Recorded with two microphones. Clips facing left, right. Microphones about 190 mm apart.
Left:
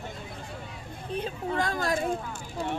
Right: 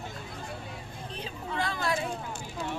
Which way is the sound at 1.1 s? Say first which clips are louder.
Left 8 dB; 50° left (ahead or behind).